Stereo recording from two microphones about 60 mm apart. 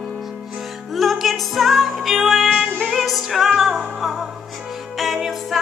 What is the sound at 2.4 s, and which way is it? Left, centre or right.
Music, centre.